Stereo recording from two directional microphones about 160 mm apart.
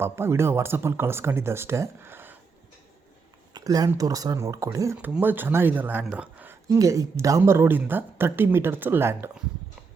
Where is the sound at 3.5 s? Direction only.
25° right (ahead or behind).